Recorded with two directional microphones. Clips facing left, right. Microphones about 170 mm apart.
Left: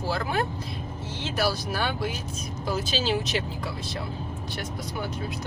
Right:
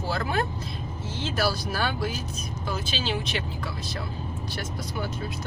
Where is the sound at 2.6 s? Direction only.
35° left (ahead or behind).